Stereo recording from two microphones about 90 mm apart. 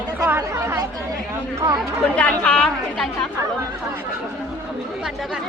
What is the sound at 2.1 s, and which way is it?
Speech, 15° left (ahead or behind).